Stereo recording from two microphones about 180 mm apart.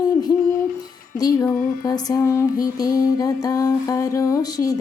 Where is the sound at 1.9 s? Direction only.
20° left (ahead or behind).